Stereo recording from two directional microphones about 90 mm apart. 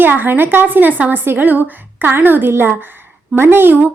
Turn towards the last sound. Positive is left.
turn(degrees=-20)  # may be behind; listen again after turning